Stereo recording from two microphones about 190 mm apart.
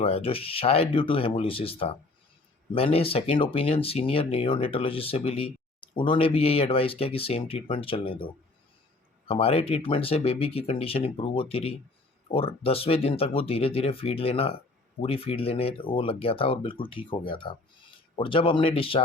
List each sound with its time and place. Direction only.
0.0 s speech: 30° left (ahead or behind)